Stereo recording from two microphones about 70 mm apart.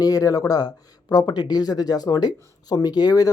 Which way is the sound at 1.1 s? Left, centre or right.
Left.